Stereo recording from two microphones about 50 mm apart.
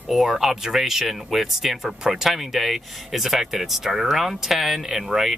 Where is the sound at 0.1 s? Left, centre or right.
Centre.